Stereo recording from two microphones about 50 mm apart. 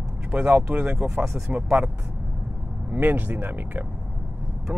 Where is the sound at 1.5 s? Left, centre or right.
Centre.